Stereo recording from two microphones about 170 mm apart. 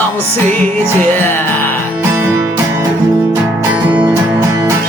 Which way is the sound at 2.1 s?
15° right (ahead or behind).